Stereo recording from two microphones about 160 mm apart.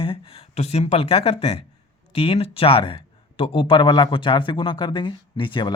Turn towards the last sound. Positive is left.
turn(degrees=30)  # may be behind; listen again after turning